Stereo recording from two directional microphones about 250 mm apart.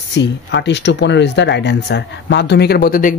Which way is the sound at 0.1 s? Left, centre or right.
Left.